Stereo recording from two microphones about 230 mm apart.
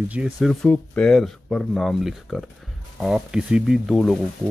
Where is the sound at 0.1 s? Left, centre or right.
Centre.